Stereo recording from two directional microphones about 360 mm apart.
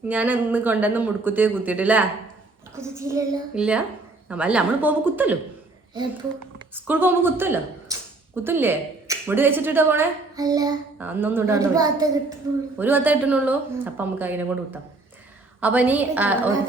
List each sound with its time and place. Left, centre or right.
0.1 s a woman's voice: centre
6.7 s a woman's voice: centre